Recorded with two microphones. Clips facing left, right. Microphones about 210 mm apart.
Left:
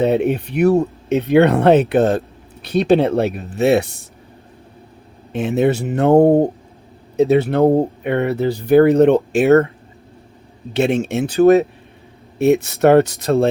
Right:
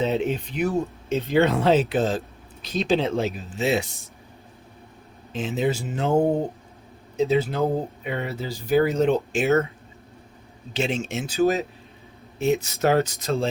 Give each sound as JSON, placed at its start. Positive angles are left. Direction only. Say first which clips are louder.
{"t": 0.0, "sound": "speech", "louder": "left 7 dB", "side_deg": 60}
{"t": 5.3, "sound": "speech", "louder": "left 8 dB", "side_deg": 65}
{"t": 10.8, "sound": "speech", "louder": "left 9 dB", "side_deg": 60}